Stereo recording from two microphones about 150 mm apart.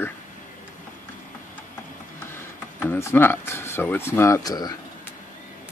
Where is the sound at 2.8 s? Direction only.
15° left (ahead or behind).